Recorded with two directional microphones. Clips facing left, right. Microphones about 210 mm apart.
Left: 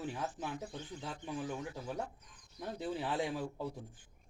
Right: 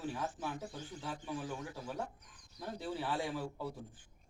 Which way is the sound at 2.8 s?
20° left (ahead or behind).